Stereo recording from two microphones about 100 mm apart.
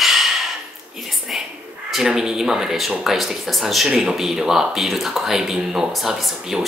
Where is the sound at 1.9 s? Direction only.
5° right (ahead or behind).